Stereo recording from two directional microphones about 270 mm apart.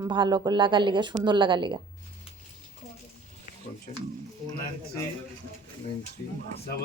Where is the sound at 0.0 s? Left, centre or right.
Centre.